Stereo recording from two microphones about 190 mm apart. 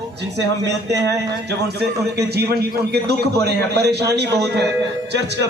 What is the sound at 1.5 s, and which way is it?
A man's voice, 60° right (ahead or behind).